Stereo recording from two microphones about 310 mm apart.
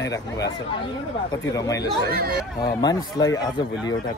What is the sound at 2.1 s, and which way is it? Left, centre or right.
Speech, right.